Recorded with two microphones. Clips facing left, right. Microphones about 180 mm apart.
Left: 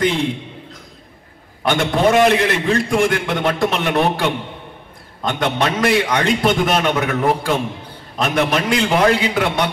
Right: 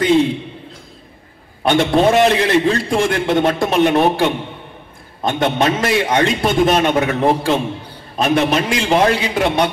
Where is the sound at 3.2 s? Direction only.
25° right (ahead or behind).